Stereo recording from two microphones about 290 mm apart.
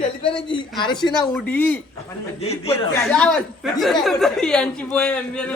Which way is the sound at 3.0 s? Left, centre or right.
Centre.